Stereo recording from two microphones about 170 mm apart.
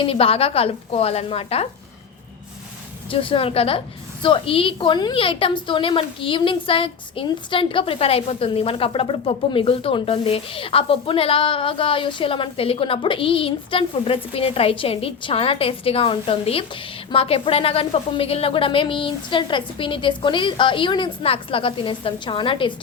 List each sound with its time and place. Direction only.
0.0 s a woman's voice: 35° left (ahead or behind)
3.1 s a woman's voice: 30° left (ahead or behind)